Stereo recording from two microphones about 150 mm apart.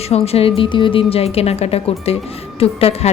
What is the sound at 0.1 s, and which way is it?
A woman's voice, 40° left (ahead or behind).